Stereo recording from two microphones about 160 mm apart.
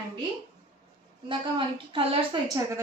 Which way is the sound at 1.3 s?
30° right (ahead or behind).